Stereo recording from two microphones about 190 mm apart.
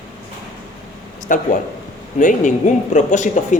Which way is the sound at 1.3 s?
45° left (ahead or behind).